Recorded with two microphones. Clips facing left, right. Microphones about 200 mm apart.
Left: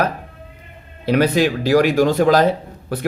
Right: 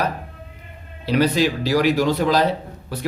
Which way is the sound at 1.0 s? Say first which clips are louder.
Left 3 dB; 55° left (ahead or behind).